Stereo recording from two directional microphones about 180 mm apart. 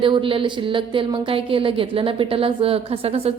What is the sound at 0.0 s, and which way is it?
A woman's voice, 30° right (ahead or behind).